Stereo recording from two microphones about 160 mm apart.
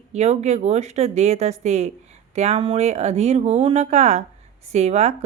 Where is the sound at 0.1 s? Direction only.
45° right (ahead or behind).